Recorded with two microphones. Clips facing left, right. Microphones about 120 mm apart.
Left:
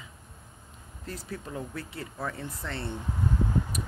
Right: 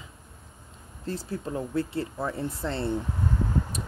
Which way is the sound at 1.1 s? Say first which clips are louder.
Right 6 dB; 30° right (ahead or behind).